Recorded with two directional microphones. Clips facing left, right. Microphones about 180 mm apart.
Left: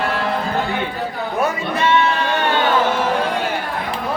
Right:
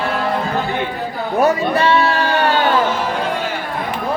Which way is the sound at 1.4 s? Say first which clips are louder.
Right 5 dB; 35° right (ahead or behind).